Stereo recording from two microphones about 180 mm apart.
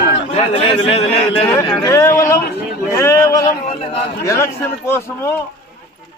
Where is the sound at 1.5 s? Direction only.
20° left (ahead or behind).